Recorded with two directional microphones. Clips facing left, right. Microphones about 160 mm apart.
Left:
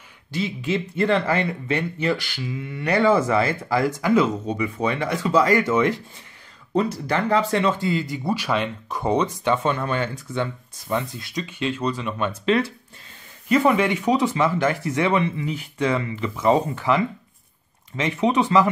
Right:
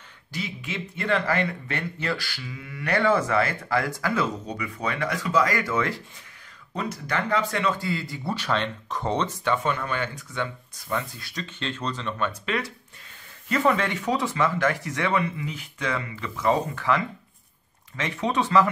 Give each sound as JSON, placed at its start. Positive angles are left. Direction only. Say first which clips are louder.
{"t": 0.3, "sound": "speech", "louder": "left 9 dB", "side_deg": 30}
{"t": 6.7, "sound": "speech", "louder": "left 7 dB", "side_deg": 30}
{"t": 12.3, "sound": "speech", "louder": "left 8 dB", "side_deg": 30}
{"t": 13.5, "sound": "speech", "louder": "left 5 dB", "side_deg": 15}